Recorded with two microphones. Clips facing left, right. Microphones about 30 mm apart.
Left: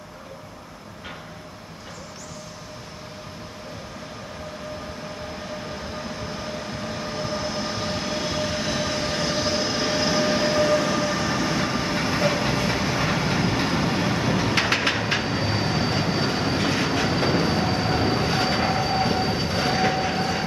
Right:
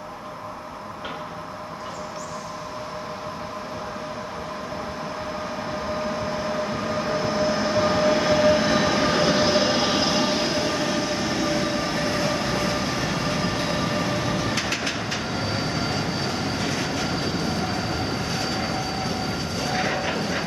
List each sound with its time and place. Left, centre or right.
6.1 s train: centre; by 10.0 s right
10.0 s vehicle: centre
10.4 s vehicle: centre
11.9 s train: centre
13.0 s vehicle: left
13.4 s train: centre
13.8 s vehicle: centre
14.5 s train: left